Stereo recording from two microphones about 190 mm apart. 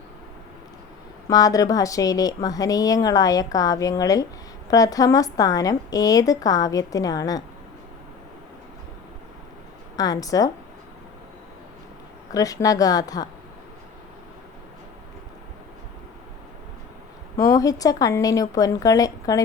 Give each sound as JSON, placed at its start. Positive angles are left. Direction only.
{"t": 1.3, "sound": "a woman's voice", "side_deg": 20}
{"t": 9.9, "sound": "a woman's voice", "side_deg": 20}
{"t": 12.3, "sound": "a woman's voice", "side_deg": 20}
{"t": 17.3, "sound": "a woman's voice", "side_deg": 20}